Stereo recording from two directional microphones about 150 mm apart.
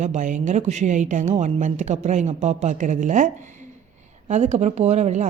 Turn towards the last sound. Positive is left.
turn(degrees=-50)  # may be behind; listen again after turning